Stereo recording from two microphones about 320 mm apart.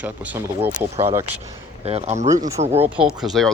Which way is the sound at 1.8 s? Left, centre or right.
Centre.